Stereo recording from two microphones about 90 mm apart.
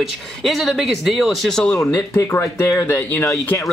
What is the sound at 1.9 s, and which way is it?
Speech, 30° left (ahead or behind).